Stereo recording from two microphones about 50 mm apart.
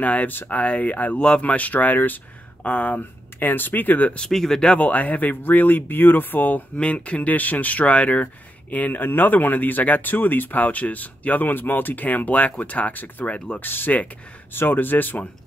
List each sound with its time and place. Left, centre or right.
0.0 s speech: left
4.3 s speech: centre
4.7 s speech: left
6.8 s speech: left
13.6 s speech: left